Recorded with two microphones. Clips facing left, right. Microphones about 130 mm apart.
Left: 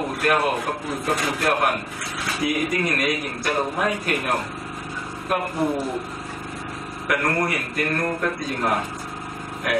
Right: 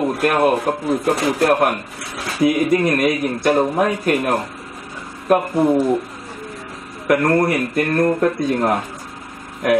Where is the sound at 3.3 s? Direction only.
35° right (ahead or behind).